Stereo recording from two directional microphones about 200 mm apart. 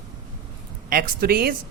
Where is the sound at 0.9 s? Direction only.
50° right (ahead or behind).